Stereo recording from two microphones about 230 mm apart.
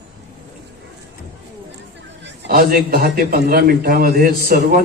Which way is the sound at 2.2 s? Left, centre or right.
Right.